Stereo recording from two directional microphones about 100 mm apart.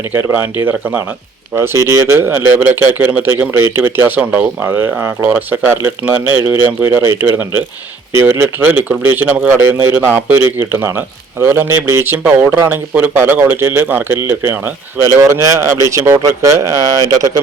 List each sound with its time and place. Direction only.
0.1 s a man's voice: 25° right (ahead or behind)